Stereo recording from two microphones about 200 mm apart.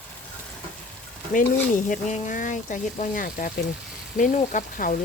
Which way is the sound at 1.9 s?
40° left (ahead or behind).